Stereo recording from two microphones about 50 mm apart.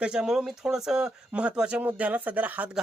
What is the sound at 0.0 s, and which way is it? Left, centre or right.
Speech, centre.